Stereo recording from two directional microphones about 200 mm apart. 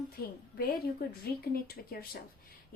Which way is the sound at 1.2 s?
50° left (ahead or behind).